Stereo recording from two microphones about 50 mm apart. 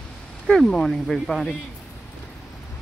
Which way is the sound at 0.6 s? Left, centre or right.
Centre.